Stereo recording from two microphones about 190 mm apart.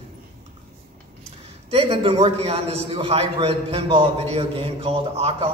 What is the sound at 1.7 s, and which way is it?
A man's voice, 30° right (ahead or behind).